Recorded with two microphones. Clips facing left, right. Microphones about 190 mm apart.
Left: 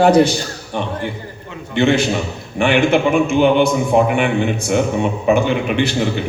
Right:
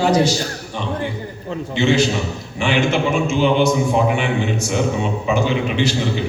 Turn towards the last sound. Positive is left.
turn(degrees=55)  # may be behind; listen again after turning